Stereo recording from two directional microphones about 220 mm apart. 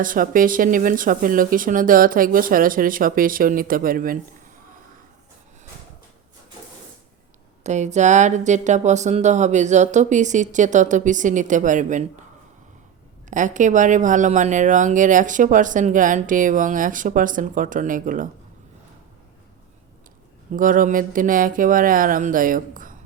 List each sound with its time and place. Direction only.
0.0 s speech: 40° right (ahead or behind)
7.6 s speech: 30° right (ahead or behind)
13.3 s speech: 35° right (ahead or behind)
20.5 s speech: 40° right (ahead or behind)